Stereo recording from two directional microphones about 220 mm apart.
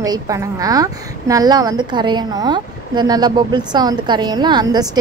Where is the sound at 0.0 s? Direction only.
15° right (ahead or behind).